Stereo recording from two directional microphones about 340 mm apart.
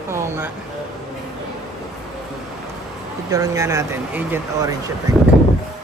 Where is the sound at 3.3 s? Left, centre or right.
Centre.